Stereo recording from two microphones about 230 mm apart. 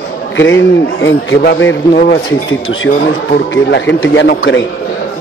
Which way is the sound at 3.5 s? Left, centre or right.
Left.